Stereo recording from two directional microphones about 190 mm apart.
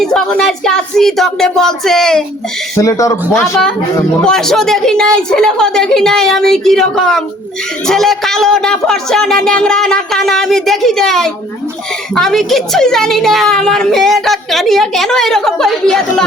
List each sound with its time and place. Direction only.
0.0 s a woman's voice: 5° left (ahead or behind)
2.7 s a man's voice: 15° left (ahead or behind)
4.2 s a woman's voice: 5° left (ahead or behind)